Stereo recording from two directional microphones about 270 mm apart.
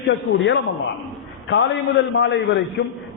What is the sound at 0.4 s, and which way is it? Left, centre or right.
Speech, left.